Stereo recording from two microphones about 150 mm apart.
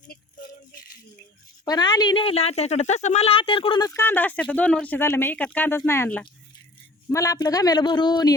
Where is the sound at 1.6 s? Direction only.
25° left (ahead or behind).